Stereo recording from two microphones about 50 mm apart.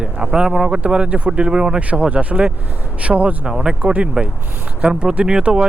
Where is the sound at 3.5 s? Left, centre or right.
Centre.